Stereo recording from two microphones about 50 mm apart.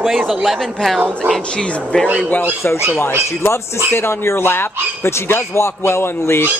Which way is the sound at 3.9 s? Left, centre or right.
Left.